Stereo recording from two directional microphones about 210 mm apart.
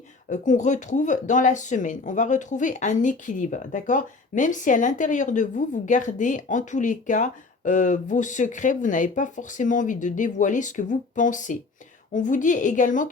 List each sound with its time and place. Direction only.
0.3 s speech: 35° left (ahead or behind)